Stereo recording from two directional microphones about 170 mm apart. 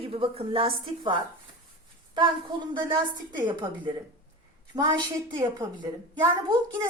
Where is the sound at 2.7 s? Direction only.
30° right (ahead or behind).